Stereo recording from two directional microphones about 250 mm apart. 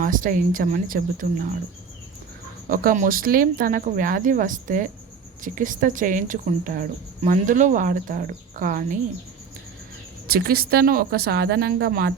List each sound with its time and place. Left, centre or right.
0.0 s speech: right
2.6 s speech: right
10.2 s speech: right